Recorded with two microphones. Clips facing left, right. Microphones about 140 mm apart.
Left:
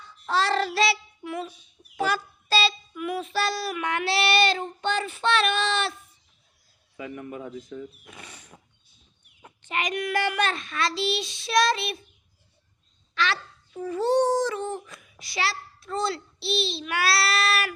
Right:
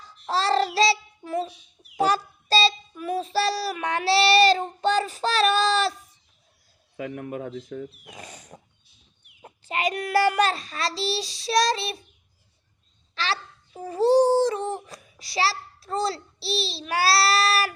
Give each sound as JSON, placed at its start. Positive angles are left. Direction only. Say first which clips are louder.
{"t": 0.0, "sound": "child singing", "louder": "even", "side_deg": -35}
{"t": 2.0, "sound": "a child's voice", "louder": "right 4 dB", "side_deg": -35}
{"t": 6.9, "sound": "speech", "louder": "right 4 dB", "side_deg": -60}
{"t": 8.0, "sound": "a child's voice", "louder": "right 3 dB", "side_deg": -40}
{"t": 13.1, "sound": "a child's voice", "louder": "left 1 dB", "side_deg": -35}